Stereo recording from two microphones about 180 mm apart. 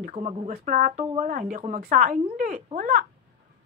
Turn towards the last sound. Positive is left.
turn(degrees=-50)  # may be behind; listen again after turning